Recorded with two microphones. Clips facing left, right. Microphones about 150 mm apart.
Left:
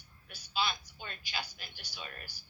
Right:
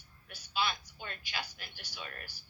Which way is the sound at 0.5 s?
25° left (ahead or behind).